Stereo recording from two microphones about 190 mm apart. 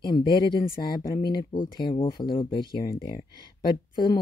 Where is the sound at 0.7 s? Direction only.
50° left (ahead or behind).